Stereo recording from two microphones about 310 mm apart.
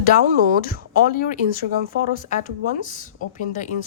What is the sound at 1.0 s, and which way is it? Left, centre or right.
Speech, left.